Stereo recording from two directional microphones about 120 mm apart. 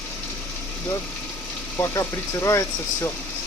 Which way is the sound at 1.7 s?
20° left (ahead or behind).